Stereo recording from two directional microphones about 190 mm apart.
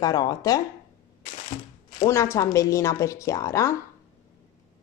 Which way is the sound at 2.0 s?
15° left (ahead or behind).